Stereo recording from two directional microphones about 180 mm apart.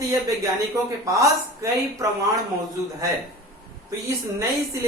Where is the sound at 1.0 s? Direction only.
15° right (ahead or behind).